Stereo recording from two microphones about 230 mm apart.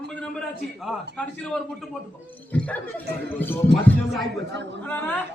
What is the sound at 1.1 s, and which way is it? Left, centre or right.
A man's voice, centre.